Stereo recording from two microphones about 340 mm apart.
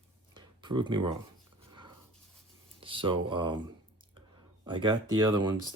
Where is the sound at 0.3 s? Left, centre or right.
Centre.